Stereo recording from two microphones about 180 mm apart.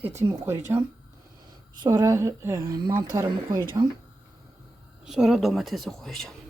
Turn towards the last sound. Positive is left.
turn(degrees=0)  # may be behind; listen again after turning